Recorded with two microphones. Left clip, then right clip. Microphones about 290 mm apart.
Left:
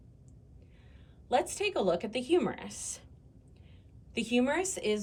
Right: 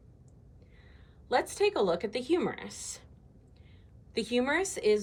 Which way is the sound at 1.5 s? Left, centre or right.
Centre.